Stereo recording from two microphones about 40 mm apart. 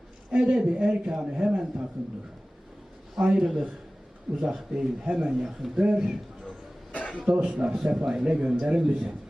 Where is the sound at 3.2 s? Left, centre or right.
Centre.